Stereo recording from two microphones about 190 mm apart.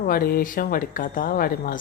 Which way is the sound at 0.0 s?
50° left (ahead or behind).